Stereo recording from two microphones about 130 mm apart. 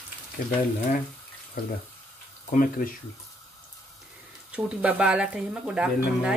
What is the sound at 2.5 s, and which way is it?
Speech, 90° left.